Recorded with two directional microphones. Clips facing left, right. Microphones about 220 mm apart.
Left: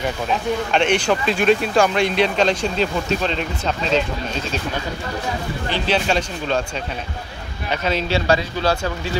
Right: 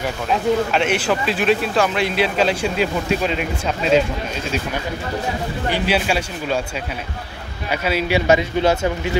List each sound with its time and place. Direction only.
0.7 s speech: 5° right (ahead or behind)
5.7 s speech: 10° right (ahead or behind)
7.7 s speech: 10° right (ahead or behind)
8.3 s speech: 20° right (ahead or behind)